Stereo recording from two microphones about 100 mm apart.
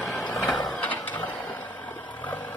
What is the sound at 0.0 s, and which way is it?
Printer, 5° left (ahead or behind).